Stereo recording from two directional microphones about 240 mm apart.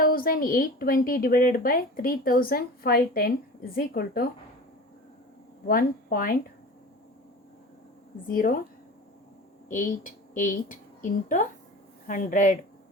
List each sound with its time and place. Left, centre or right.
0.0 s speech: left
5.6 s speech: left
8.3 s speech: left
9.6 s a woman's voice: left